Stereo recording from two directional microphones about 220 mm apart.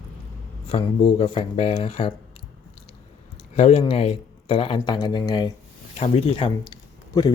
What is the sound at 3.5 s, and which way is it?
Speech, 25° left (ahead or behind).